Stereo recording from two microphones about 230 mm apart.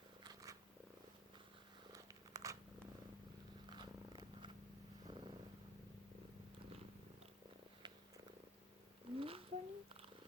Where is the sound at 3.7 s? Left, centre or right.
Centre.